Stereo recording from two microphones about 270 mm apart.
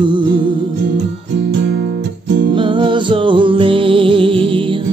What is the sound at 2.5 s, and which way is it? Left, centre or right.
Music, centre.